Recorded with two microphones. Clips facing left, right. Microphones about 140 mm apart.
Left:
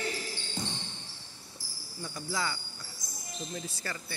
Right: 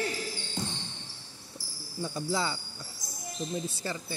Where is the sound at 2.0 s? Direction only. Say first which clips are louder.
Right 4 dB; 30° right (ahead or behind).